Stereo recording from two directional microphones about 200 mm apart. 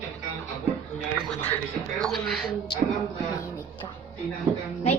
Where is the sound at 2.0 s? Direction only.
Centre (ahead or behind).